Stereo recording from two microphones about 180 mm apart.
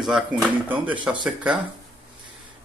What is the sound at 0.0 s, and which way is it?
A man's voice, 5° right (ahead or behind).